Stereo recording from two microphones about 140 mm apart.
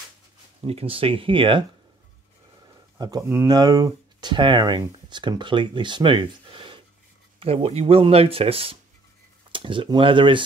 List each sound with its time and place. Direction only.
0.6 s speech: 45° right (ahead or behind)
3.0 s speech: 25° right (ahead or behind)